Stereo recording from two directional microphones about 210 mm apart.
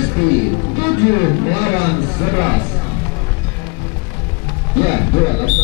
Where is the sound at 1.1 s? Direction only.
15° left (ahead or behind).